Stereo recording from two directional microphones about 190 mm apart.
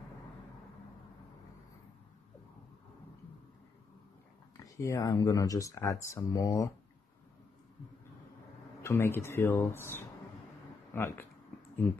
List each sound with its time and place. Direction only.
4.7 s speech: 15° left (ahead or behind)
8.8 s speech: 15° left (ahead or behind)